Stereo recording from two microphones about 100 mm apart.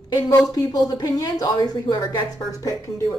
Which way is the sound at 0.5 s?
40° left (ahead or behind).